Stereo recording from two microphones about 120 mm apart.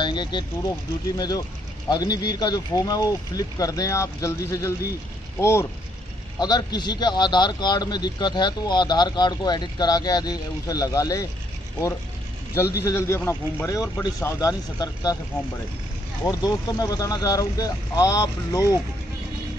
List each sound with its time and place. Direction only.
0.0 s a man's voice: 40° left (ahead or behind); by 5.7 s 20° left (ahead or behind)
6.4 s a man's voice: 35° left (ahead or behind)
12.9 s speech: 20° left (ahead or behind)
16.3 s speech: 30° left (ahead or behind)